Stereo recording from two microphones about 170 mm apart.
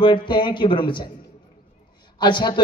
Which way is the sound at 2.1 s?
25° left (ahead or behind).